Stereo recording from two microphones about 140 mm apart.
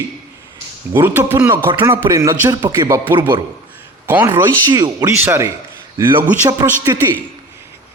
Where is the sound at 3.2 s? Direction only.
35° right (ahead or behind).